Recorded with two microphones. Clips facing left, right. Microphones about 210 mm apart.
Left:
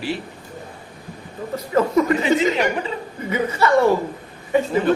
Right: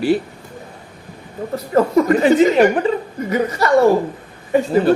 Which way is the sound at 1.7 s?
45° right (ahead or behind).